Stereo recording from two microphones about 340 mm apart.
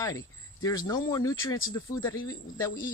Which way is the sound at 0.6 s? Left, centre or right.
Centre.